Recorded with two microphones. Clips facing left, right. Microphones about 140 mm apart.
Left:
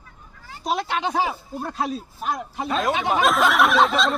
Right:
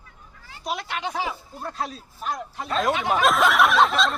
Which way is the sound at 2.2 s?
15° left (ahead or behind).